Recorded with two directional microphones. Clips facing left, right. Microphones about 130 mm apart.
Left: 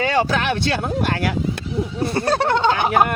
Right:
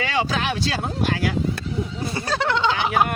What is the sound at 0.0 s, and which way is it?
Speech, 50° left (ahead or behind).